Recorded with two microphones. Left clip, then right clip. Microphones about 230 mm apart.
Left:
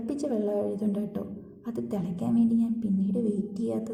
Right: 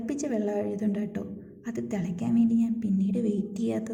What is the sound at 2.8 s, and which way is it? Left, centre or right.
Speech, right.